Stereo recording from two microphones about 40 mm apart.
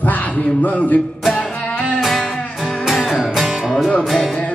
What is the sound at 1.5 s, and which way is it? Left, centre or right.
Music, left.